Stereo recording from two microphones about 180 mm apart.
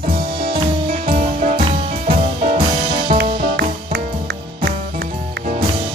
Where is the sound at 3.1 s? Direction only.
50° right (ahead or behind).